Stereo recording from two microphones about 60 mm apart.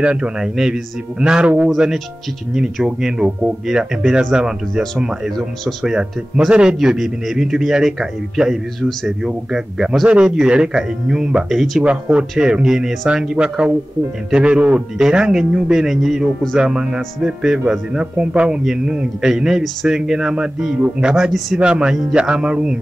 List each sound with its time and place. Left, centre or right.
0.0 s a man's voice: centre
2.5 s a man's voice: centre